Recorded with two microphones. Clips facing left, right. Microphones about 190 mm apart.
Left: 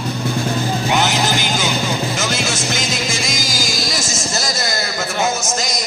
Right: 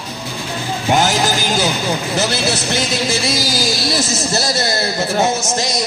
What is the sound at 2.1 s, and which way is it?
A man's voice, 35° right (ahead or behind).